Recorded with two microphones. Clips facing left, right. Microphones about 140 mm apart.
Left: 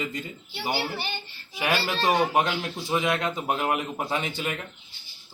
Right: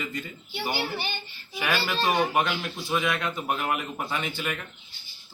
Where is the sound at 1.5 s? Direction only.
30° left (ahead or behind).